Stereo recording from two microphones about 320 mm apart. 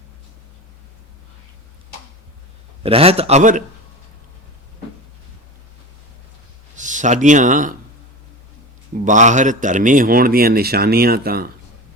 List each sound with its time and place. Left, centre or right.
2.8 s a man's voice: centre
6.7 s speech: right
9.0 s a man's voice: right